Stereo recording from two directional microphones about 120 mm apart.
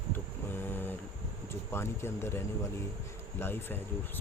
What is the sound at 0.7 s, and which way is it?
Speech, 15° left (ahead or behind).